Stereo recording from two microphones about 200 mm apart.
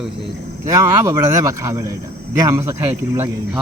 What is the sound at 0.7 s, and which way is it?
Speech, 15° right (ahead or behind).